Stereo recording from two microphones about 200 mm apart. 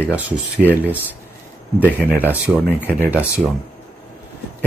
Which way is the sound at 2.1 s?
10° right (ahead or behind).